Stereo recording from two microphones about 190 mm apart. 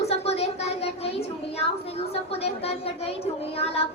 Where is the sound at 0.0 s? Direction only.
35° left (ahead or behind).